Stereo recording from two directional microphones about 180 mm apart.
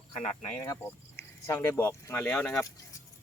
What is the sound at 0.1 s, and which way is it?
Speech, 40° left (ahead or behind).